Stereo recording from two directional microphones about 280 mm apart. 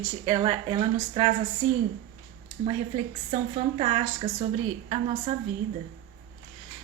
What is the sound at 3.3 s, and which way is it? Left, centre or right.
A woman's voice, right.